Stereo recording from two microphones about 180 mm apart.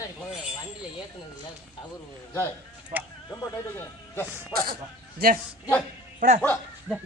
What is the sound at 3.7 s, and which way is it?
Speech, 10° left (ahead or behind).